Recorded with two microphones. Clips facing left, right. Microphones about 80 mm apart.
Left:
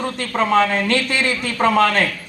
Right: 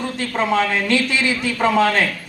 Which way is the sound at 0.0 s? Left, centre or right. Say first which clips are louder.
Even; left.